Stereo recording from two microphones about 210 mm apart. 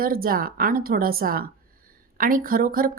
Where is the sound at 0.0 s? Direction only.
45° right (ahead or behind).